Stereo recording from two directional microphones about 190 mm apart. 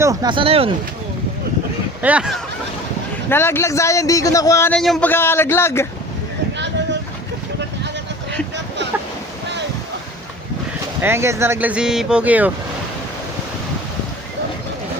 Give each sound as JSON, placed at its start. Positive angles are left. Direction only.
{"t": 0.0, "sound": "speech", "side_deg": -20}
{"t": 2.0, "sound": "speech", "side_deg": -5}
{"t": 3.2, "sound": "speech", "side_deg": 10}
{"t": 4.8, "sound": "speech", "side_deg": 5}
{"t": 11.0, "sound": "speech", "side_deg": -15}